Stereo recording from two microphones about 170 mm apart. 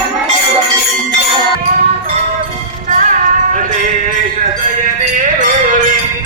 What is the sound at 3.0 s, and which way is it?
Music, 50° right (ahead or behind).